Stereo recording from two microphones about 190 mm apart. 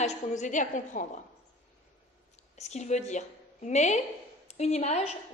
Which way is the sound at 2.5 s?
35° left (ahead or behind).